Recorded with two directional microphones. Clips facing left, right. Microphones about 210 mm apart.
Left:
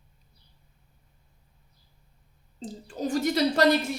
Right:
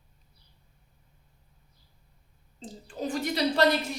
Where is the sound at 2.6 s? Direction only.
40° left (ahead or behind).